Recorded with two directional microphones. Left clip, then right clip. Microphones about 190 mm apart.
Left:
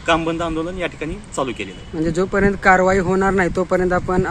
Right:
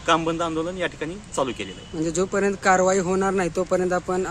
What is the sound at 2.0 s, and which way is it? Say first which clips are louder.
Speech: left 5 dB; 5° right (ahead or behind).